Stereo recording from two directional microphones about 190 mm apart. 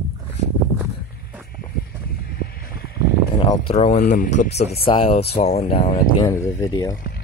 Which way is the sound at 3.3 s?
30° left (ahead or behind).